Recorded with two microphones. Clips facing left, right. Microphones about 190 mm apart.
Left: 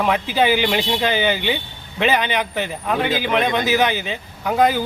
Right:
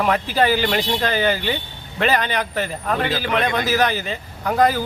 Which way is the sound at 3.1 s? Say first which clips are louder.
Left 2 dB; 20° left (ahead or behind).